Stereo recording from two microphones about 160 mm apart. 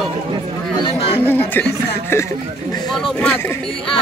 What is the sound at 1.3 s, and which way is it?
Speech, 10° left (ahead or behind).